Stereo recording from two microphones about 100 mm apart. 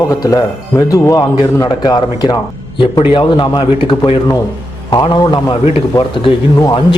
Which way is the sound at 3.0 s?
55° left (ahead or behind).